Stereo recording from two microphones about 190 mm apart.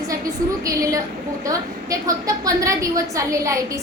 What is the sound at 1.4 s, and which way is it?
A woman's voice, 15° right (ahead or behind).